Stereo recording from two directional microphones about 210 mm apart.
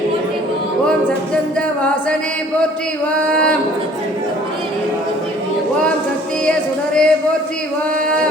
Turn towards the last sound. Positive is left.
turn(degrees=5)  # may be behind; listen again after turning